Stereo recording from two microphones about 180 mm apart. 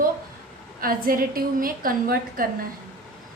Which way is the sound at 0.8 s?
55° right (ahead or behind).